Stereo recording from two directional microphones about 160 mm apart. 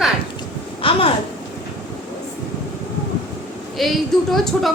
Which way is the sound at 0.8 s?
35° left (ahead or behind).